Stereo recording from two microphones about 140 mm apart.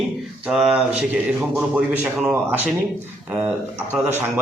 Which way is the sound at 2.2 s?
15° right (ahead or behind).